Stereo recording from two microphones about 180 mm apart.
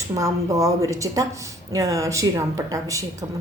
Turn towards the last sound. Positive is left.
turn(degrees=-20)  # may be behind; listen again after turning